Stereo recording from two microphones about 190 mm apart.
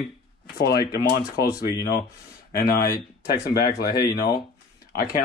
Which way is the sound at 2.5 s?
55° left (ahead or behind).